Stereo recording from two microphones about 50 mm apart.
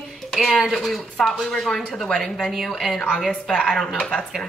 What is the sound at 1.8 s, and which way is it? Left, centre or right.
Speech, centre.